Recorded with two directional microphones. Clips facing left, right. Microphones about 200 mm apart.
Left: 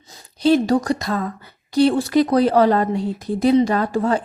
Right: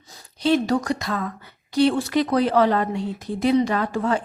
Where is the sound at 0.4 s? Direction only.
35° left (ahead or behind).